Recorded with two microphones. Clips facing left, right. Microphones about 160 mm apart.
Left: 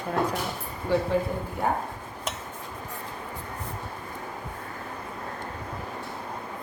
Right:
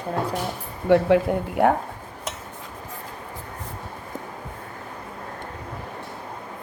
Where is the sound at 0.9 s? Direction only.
75° right (ahead or behind).